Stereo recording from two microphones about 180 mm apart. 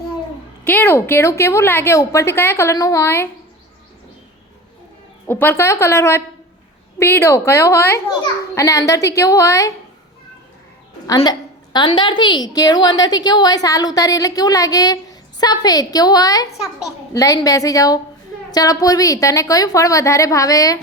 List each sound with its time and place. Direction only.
0.6 s a woman's voice: 10° left (ahead or behind)
5.2 s a woman's voice: 10° left (ahead or behind)
11.0 s a woman's voice: 20° left (ahead or behind)